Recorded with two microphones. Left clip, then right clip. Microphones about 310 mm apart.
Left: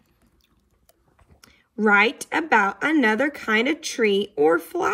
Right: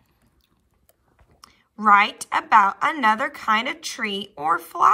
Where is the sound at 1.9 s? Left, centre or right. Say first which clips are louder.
Right 3 dB; right.